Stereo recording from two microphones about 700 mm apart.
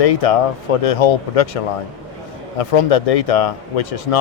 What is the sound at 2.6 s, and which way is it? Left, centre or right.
Speech, left.